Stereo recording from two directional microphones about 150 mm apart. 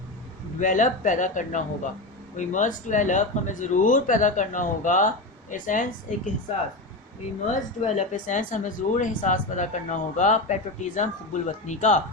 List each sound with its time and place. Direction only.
0.6 s speech: 60° left (ahead or behind)
7.8 s speech: 55° left (ahead or behind)